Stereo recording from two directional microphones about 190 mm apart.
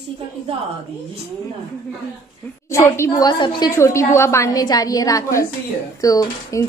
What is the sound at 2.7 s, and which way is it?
A woman's voice, 15° left (ahead or behind).